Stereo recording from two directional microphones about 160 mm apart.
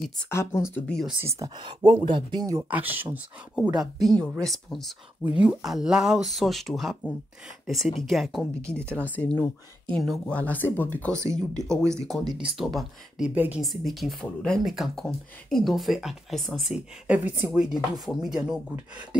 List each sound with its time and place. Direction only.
0.2 s speech: 15° left (ahead or behind)
1.2 s speech: 20° right (ahead or behind)
2.7 s speech: 10° right (ahead or behind)
11.8 s speech: 20° right (ahead or behind)
12.5 s speech: centre (ahead or behind)